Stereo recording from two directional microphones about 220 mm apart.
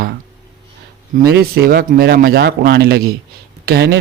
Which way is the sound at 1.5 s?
45° right (ahead or behind).